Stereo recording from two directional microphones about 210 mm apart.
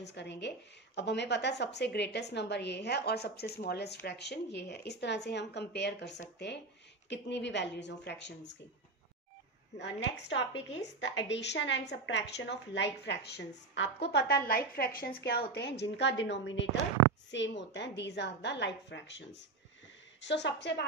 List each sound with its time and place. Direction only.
0.0 s a woman's voice: 55° left (ahead or behind)
9.8 s a woman's voice: 55° left (ahead or behind)